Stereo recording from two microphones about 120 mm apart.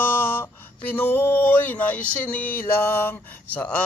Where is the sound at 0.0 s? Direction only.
20° left (ahead or behind).